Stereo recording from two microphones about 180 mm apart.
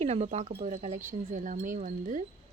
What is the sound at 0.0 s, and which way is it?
A woman's voice, 35° right (ahead or behind).